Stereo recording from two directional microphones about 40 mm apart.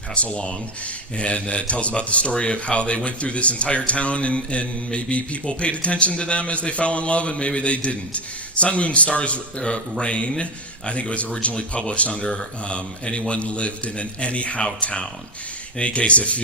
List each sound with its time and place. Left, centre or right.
0.1 s speech: left